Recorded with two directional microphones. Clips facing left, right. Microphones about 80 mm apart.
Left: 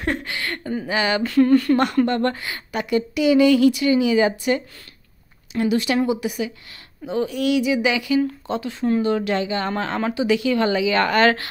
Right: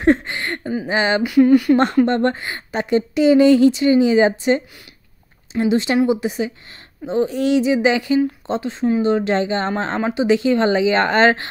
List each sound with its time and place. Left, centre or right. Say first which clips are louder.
0.0 s a sound: right 9 dB; right
0.8 s speech: right 3 dB; right
1.2 s speech: right 3 dB; centre
2.0 s speech: right 3 dB; right